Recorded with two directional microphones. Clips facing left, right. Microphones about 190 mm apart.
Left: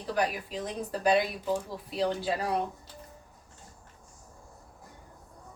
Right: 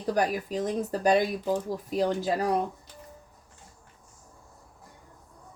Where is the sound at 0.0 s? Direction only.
45° right (ahead or behind).